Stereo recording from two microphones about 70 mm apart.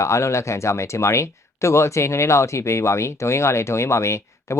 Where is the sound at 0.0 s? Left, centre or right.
Left.